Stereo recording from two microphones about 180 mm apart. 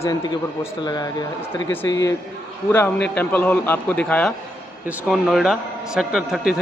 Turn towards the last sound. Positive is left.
turn(degrees=0)  # may be behind; listen again after turning